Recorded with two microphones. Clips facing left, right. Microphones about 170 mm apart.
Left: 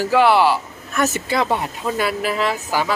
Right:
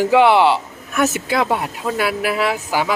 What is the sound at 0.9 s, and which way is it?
A man's voice, 5° right (ahead or behind).